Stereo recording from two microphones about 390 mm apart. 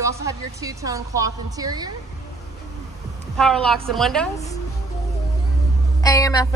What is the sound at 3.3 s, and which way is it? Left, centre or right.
A woman's voice, centre.